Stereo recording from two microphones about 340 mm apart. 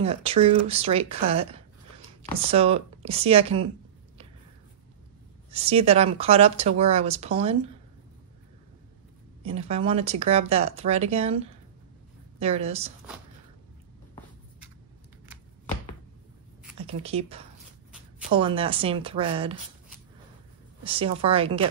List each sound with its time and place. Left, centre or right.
0.0 s speech: centre
5.5 s speech: centre
9.4 s speech: centre
17.0 s speech: centre
20.8 s speech: centre